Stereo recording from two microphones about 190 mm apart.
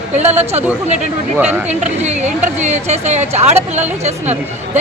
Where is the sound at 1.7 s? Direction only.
35° right (ahead or behind).